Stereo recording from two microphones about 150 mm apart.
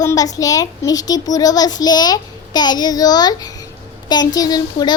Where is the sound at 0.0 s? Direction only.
25° left (ahead or behind).